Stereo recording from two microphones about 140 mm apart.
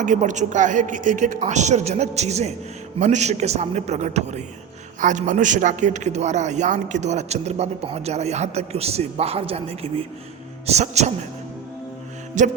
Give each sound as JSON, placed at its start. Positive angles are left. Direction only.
{"t": 0.0, "sound": "a woman's voice", "side_deg": -60}
{"t": 12.4, "sound": "a woman's voice", "side_deg": -60}